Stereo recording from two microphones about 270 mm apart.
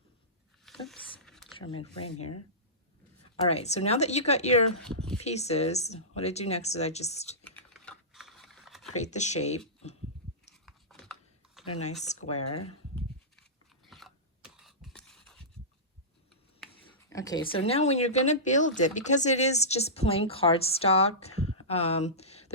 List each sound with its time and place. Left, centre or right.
0.6 s a sound: centre
2.0 s speech: left
3.4 s speech: left
7.4 s computer keyboard: centre
9.0 s speech: left
10.5 s filing: centre
11.6 s speech: left
12.3 s speech: left
13.8 s mechanisms: centre
16.8 s speech: centre
21.2 s a sound: left